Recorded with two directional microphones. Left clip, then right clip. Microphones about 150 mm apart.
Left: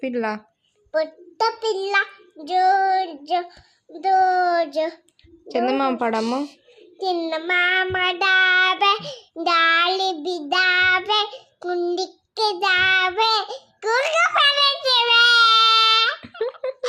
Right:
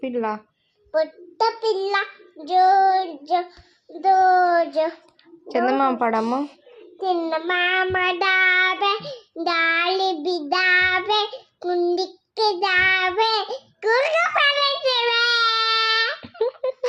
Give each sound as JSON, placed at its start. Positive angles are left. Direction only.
{"t": 0.0, "sound": "a woman's voice", "side_deg": 20}
{"t": 5.5, "sound": "a woman's voice", "side_deg": 10}
{"t": 5.7, "sound": "a child's voice", "side_deg": 25}
{"t": 7.0, "sound": "child singing", "side_deg": 30}
{"t": 16.3, "sound": "a sound", "side_deg": 15}